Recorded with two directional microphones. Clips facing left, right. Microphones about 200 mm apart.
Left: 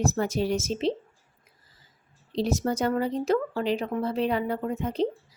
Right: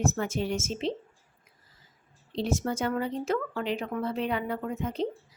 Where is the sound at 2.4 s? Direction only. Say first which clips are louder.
Left 3 dB; 35° left (ahead or behind).